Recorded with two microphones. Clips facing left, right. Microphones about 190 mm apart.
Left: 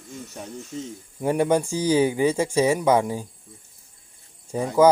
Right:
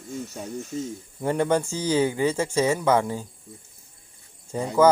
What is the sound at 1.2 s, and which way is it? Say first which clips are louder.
Speech: left 2 dB; 10° left (ahead or behind).